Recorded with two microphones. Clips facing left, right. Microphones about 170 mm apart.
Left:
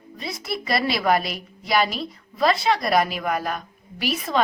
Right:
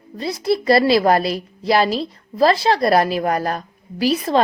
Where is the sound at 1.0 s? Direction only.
35° right (ahead or behind).